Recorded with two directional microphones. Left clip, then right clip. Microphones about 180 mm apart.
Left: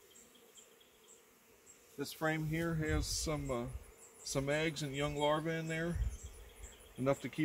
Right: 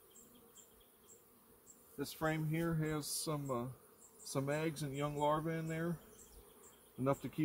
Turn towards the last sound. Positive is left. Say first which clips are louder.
# left 2 dB
turn(degrees=0)  # may be behind; listen again after turning